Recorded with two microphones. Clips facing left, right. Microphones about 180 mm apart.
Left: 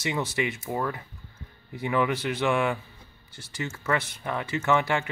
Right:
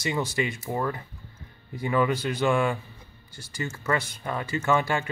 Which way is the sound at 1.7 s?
15° left (ahead or behind).